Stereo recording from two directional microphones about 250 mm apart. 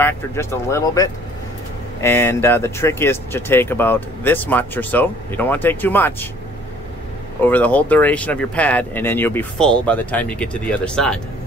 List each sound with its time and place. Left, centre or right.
0.0 s speech: centre
7.4 s speech: centre